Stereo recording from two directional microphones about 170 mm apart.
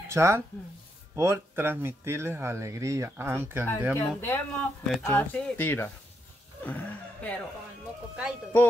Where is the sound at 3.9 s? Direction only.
15° left (ahead or behind).